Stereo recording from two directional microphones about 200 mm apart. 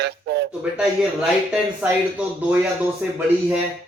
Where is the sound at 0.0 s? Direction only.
55° right (ahead or behind).